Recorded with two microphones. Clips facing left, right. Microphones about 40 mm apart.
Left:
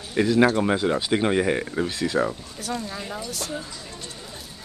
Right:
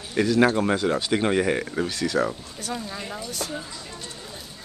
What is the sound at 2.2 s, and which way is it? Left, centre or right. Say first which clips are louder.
Speech: left 1 dB; centre.